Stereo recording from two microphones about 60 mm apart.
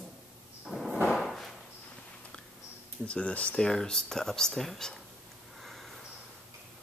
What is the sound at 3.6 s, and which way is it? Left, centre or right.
Speech, centre.